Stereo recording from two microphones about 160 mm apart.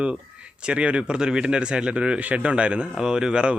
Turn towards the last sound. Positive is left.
turn(degrees=-5)  # may be behind; listen again after turning